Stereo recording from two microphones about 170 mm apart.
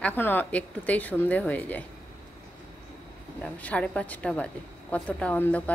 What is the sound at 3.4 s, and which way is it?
A woman's voice, 10° left (ahead or behind).